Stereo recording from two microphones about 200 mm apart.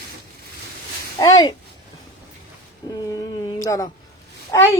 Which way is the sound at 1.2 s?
20° left (ahead or behind).